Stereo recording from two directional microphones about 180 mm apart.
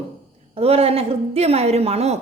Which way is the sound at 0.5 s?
35° right (ahead or behind).